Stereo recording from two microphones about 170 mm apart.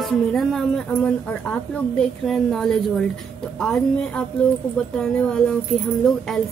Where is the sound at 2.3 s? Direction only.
Centre (ahead or behind).